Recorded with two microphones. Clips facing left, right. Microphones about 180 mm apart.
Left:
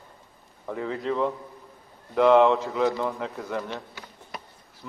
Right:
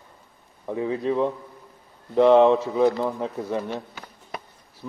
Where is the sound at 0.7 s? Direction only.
15° right (ahead or behind).